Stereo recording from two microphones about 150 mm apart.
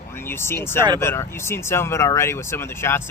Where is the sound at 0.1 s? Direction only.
15° left (ahead or behind).